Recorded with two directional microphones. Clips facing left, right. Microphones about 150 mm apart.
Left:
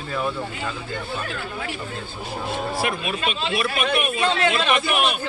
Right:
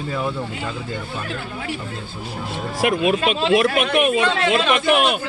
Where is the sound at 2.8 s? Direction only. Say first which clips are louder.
Right 13 dB; 80° right.